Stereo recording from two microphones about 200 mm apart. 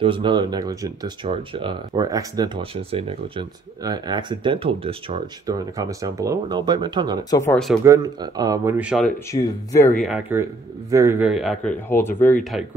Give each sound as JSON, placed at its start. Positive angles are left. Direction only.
{"t": 0.0, "sound": "speech", "side_deg": -25}
{"t": 5.8, "sound": "speech", "side_deg": -15}
{"t": 7.2, "sound": "speech", "side_deg": 15}
{"t": 7.8, "sound": "speech", "side_deg": -15}
{"t": 8.7, "sound": "speech", "side_deg": -5}
{"t": 9.3, "sound": "speech", "side_deg": 15}
{"t": 9.9, "sound": "speech", "side_deg": 0}
{"t": 10.3, "sound": "speech", "side_deg": -15}